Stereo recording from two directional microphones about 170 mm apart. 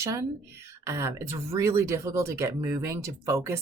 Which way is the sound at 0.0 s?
20° right (ahead or behind).